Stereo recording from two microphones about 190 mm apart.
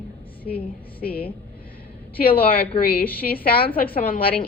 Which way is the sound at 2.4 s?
30° left (ahead or behind).